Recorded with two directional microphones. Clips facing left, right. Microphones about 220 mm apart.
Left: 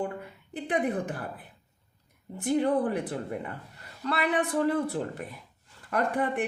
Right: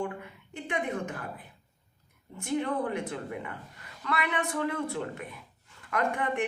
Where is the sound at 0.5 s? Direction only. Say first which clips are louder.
Left 4 dB; 35° left (ahead or behind).